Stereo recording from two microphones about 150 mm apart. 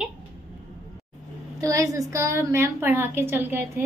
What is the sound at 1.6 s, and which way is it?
A woman's voice, 20° right (ahead or behind).